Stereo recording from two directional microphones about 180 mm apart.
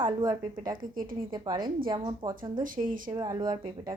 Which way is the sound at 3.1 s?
25° right (ahead or behind).